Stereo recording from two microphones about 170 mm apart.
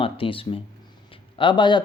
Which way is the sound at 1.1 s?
30° left (ahead or behind).